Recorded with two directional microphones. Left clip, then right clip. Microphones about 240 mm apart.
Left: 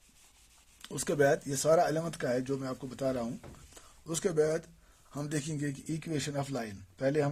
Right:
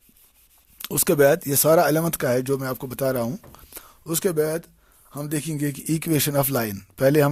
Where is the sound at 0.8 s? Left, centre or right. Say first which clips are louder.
Right 10 dB; right.